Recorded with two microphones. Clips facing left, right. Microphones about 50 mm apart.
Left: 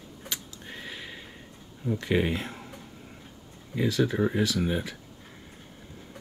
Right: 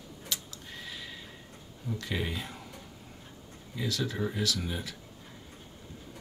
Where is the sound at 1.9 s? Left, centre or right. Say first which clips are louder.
Left 8 dB; left.